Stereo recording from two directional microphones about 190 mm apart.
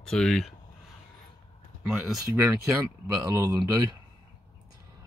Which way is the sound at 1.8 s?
Centre (ahead or behind).